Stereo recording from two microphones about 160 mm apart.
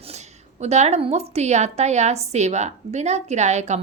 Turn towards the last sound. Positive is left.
turn(degrees=-45)  # may be behind; listen again after turning